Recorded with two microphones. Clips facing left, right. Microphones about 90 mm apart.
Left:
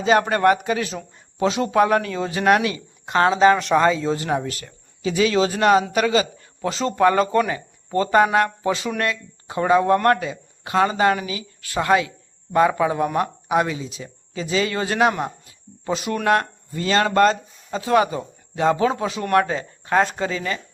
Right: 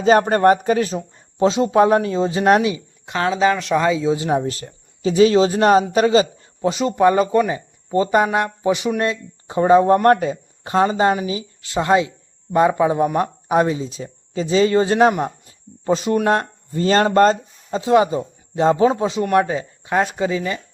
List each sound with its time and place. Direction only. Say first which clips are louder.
0.0 s speech: right 3 dB; 40° right (ahead or behind)
3.1 s speech: left 2 dB; centre (ahead or behind)
4.3 s a man's voice: right 4 dB; 30° right (ahead or behind)
6.7 s a man's voice: right 2 dB; 15° right (ahead or behind)
19.2 s speech: right 1 dB; 15° right (ahead or behind)